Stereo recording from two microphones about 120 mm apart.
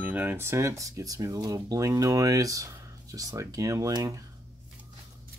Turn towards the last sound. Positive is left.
turn(degrees=-30)  # may be behind; listen again after turning